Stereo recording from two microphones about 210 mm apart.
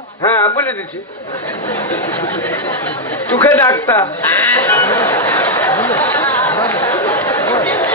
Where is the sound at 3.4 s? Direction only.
10° left (ahead or behind).